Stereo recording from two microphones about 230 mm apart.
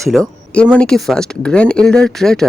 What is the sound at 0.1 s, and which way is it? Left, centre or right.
Speech, centre.